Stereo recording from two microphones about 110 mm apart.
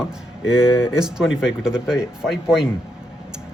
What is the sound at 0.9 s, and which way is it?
Speech, 5° right (ahead or behind).